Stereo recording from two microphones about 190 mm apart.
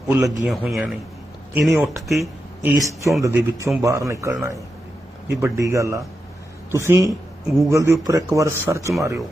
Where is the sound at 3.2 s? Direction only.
15° right (ahead or behind).